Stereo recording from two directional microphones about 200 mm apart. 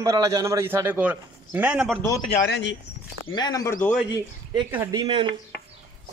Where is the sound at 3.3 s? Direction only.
20° left (ahead or behind).